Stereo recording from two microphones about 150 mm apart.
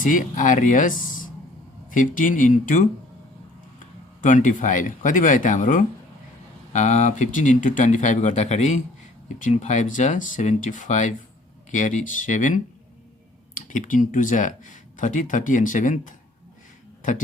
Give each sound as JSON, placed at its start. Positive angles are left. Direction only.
{"t": 0.0, "sound": "speech", "side_deg": 60}